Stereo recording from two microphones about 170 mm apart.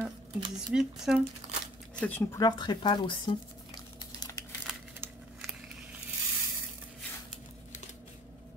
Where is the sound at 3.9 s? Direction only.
20° left (ahead or behind).